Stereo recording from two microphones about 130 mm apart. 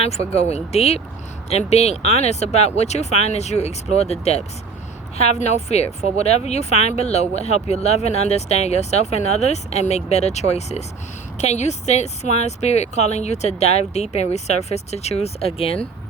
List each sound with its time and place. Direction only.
0.0 s speech: 55° left (ahead or behind)